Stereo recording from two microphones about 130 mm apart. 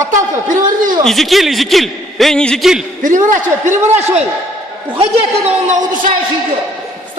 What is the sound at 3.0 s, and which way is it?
Speech, 80° right.